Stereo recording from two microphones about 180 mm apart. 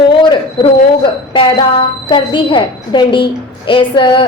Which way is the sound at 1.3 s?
30° left (ahead or behind).